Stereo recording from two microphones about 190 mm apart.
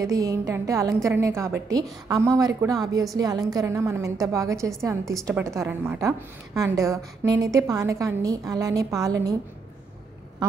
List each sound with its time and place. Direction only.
0.0 s a woman's voice: 20° right (ahead or behind)